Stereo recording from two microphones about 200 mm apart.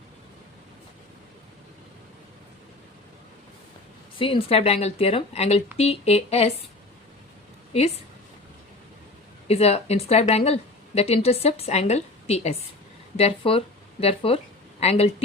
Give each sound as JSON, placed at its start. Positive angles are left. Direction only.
{"t": 4.2, "sound": "a woman's voice", "side_deg": 30}
{"t": 9.5, "sound": "a woman's voice", "side_deg": 30}